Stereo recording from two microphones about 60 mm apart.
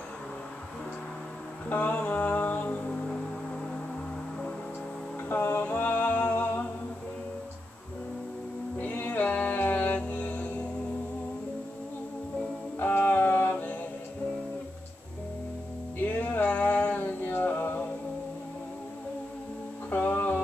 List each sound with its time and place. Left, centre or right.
1.7 s mantra: left
5.3 s humming: left
8.7 s music: left
12.7 s music: left
16.0 s music: left
19.9 s music: left